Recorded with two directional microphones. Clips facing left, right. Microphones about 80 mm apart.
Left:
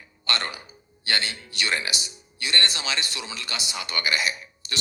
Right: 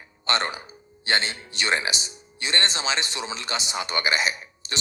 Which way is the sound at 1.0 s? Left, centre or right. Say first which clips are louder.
Right 3 dB; right.